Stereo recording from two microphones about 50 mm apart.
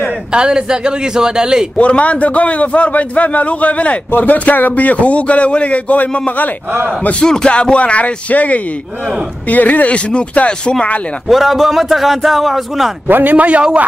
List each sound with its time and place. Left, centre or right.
0.3 s a woman's voice: centre
1.8 s speech: left
4.1 s speech: left
7.2 s speech: centre
11.2 s a man's voice: centre
13.0 s a man's voice: right